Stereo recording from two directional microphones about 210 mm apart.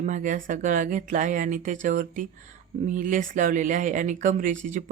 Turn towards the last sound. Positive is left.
turn(degrees=-35)  # may be behind; listen again after turning